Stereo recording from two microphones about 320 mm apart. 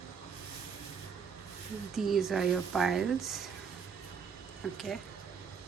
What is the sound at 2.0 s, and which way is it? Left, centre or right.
Speech, centre.